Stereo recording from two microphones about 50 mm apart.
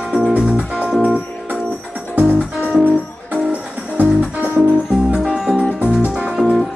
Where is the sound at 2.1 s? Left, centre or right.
Right.